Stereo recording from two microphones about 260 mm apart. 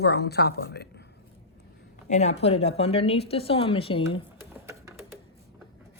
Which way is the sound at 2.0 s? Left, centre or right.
Left.